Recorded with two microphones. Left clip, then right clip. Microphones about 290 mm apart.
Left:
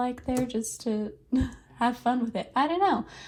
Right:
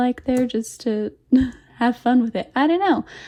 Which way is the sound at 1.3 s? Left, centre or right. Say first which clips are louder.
Right 11 dB; right.